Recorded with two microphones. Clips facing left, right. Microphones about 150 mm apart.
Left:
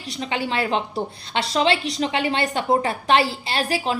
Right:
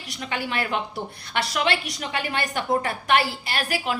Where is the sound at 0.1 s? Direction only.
25° left (ahead or behind).